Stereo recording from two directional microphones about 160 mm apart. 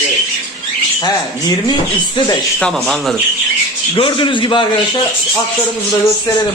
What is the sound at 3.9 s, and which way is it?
Speech, 30° left (ahead or behind).